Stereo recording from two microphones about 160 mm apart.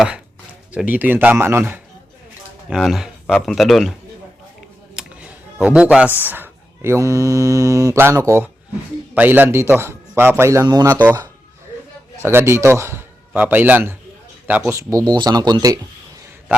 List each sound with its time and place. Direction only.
0.7 s a man's voice: 10° right (ahead or behind)
2.6 s speech: centre (ahead or behind)
4.9 s a man's voice: 5° right (ahead or behind); by 15.8 s 25° right (ahead or behind)